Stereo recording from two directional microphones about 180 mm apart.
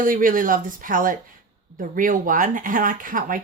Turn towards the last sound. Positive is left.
turn(degrees=-50)  # may be behind; listen again after turning